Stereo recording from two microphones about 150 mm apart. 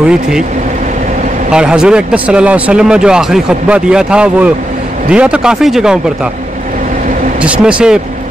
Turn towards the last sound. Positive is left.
turn(degrees=-10)  # may be behind; listen again after turning